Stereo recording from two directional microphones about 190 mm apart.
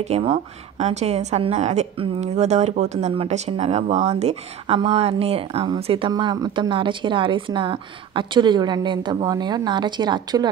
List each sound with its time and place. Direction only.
0.1 s speech: 30° right (ahead or behind)